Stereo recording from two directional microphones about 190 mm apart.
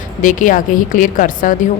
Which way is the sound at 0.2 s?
45° left (ahead or behind).